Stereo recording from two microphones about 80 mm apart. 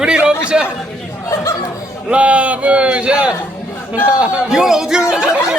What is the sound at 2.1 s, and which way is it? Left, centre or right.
A man's voice, centre.